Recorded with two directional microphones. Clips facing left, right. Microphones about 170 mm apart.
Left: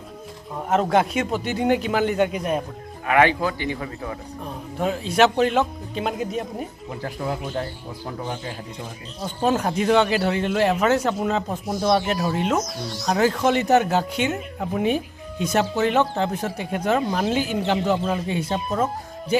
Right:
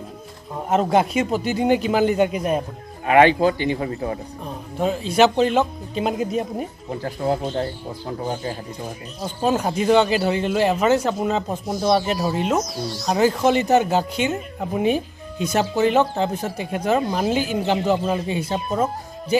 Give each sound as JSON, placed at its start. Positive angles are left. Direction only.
{"t": 0.6, "sound": "speech", "side_deg": -5}
{"t": 3.1, "sound": "a man's voice", "side_deg": -25}
{"t": 4.4, "sound": "speech", "side_deg": -5}
{"t": 7.2, "sound": "speech", "side_deg": -35}
{"t": 9.5, "sound": "speech", "side_deg": -5}